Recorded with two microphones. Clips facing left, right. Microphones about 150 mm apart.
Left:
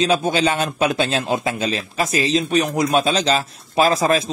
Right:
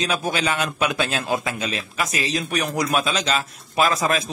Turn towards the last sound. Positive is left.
turn(degrees=30)  # may be behind; listen again after turning